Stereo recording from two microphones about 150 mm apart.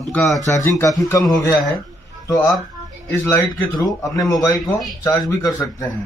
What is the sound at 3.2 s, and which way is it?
Speech, 15° left (ahead or behind).